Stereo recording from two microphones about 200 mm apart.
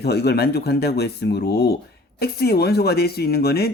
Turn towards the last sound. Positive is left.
turn(degrees=50)  # may be behind; listen again after turning